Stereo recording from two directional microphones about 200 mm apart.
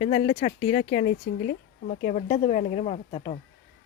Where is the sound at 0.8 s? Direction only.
65° left (ahead or behind).